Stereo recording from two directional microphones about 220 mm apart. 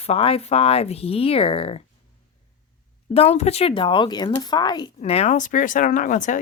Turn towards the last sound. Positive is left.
turn(degrees=35)  # may be behind; listen again after turning